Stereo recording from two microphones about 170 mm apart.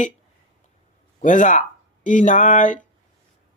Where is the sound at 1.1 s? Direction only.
50° left (ahead or behind).